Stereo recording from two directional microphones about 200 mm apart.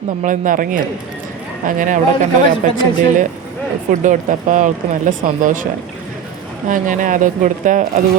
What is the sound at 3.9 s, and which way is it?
Speech, 40° right (ahead or behind).